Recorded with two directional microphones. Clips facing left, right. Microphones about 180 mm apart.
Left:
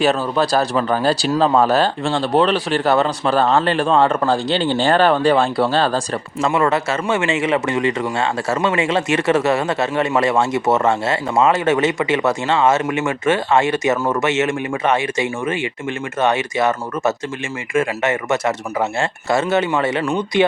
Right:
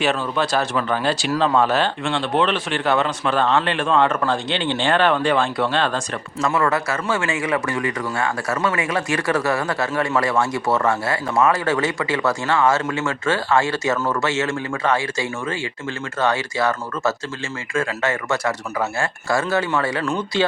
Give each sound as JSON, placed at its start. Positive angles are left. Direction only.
{"t": 0.0, "sound": "speech", "side_deg": 40}